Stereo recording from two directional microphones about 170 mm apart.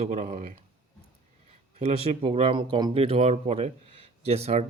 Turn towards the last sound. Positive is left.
turn(degrees=-35)  # may be behind; listen again after turning